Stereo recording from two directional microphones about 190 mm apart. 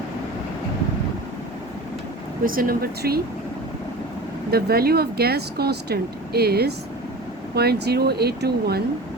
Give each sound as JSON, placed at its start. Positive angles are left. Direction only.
{"t": 2.4, "sound": "speech", "side_deg": -50}
{"t": 4.5, "sound": "speech", "side_deg": -55}